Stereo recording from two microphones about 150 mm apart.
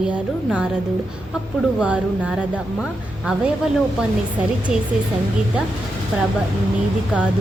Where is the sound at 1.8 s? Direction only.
10° right (ahead or behind).